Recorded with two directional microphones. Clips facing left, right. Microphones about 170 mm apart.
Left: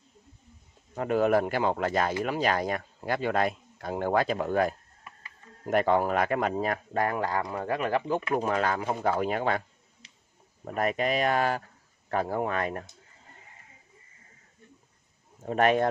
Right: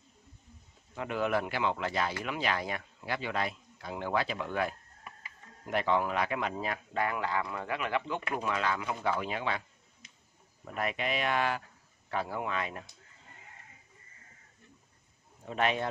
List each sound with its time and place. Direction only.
0.9 s speech: 40° left (ahead or behind)
10.6 s speech: 45° left (ahead or behind)
15.4 s speech: 50° left (ahead or behind)